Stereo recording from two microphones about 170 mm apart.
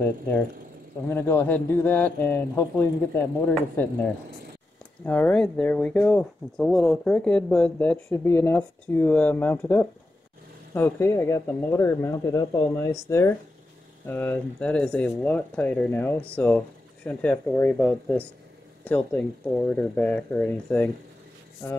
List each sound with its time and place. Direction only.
1.0 s speech: 15° left (ahead or behind)